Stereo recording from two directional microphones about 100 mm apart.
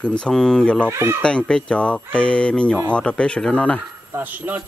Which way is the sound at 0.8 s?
25° right (ahead or behind).